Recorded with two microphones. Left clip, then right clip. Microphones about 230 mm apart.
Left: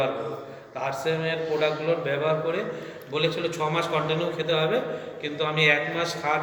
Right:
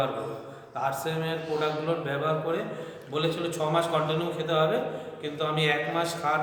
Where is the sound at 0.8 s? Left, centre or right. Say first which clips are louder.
Left 2 dB; right.